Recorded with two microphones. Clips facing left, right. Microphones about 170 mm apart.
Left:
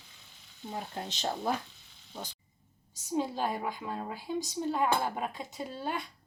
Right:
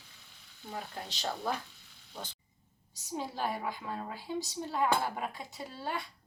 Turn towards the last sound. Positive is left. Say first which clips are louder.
# left 3 dB
turn(degrees=20)  # may be behind; listen again after turning